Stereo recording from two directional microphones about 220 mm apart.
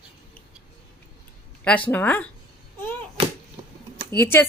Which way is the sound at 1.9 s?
10° left (ahead or behind).